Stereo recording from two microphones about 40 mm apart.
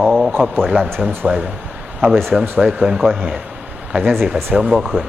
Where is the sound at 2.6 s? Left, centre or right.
Centre.